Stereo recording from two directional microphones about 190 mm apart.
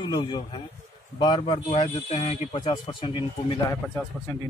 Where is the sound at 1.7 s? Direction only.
35° left (ahead or behind).